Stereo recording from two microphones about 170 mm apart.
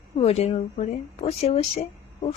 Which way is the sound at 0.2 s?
35° left (ahead or behind).